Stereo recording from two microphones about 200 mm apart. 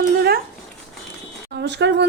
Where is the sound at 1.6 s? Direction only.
60° right (ahead or behind).